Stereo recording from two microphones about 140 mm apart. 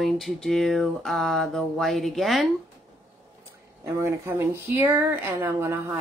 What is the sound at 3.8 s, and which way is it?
Speech, 20° right (ahead or behind).